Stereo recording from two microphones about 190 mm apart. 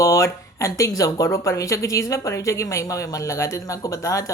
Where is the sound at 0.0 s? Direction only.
15° left (ahead or behind).